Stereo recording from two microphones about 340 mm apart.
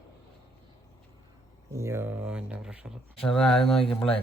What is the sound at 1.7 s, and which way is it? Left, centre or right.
A man's voice, centre.